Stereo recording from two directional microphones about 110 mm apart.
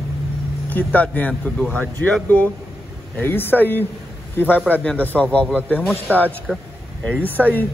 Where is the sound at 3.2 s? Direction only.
20° left (ahead or behind).